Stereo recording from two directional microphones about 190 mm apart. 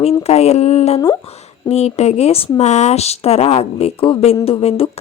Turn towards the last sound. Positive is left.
turn(degrees=30)  # may be behind; listen again after turning